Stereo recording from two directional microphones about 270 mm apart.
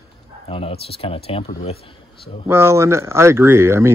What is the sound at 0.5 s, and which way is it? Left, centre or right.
Speech, left.